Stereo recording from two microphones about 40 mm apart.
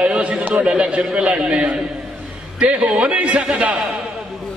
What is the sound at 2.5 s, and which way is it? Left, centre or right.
Speech, right.